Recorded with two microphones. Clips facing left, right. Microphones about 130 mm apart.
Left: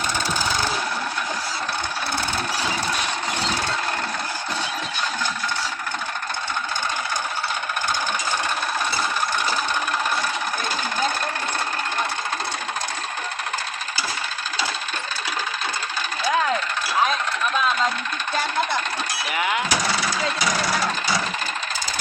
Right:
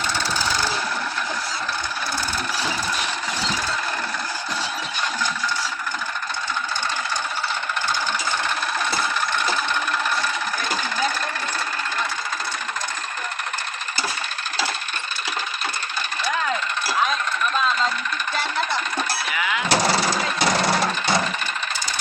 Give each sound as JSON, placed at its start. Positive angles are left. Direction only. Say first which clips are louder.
{"t": 19.3, "sound": "vehicle", "louder": "left 6 dB", "side_deg": 50}
{"t": 19.7, "sound": "vehicle", "louder": "right 4 dB", "side_deg": -30}